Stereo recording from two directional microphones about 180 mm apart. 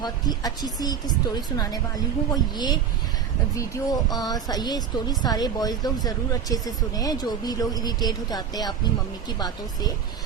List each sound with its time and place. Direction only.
0.0 s a woman's voice: 20° left (ahead or behind)